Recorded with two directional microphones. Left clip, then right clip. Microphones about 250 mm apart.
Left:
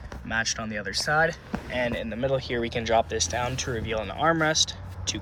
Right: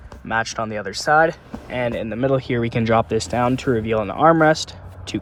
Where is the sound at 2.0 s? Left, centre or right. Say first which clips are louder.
Right 6 dB; right.